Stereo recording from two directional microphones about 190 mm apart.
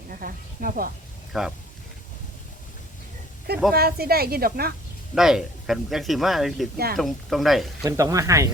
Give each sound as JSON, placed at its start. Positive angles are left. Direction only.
{"t": 0.1, "sound": "speech", "side_deg": -50}
{"t": 1.3, "sound": "speech", "side_deg": 0}
{"t": 3.7, "sound": "speech", "side_deg": -55}
{"t": 5.1, "sound": "speech", "side_deg": 0}
{"t": 7.9, "sound": "speech", "side_deg": -15}